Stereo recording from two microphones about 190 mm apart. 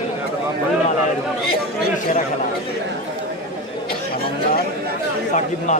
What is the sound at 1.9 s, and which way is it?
Speech, 40° left (ahead or behind).